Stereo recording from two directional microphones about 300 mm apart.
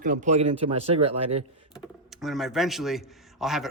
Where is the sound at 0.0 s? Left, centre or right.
Right.